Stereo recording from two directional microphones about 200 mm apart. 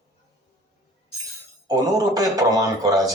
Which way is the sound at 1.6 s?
15° right (ahead or behind).